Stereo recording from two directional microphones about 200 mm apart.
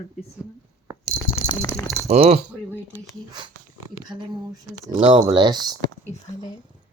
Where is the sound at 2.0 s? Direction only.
30° right (ahead or behind).